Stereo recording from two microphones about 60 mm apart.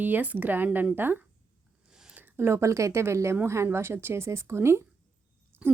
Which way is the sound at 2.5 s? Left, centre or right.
Right.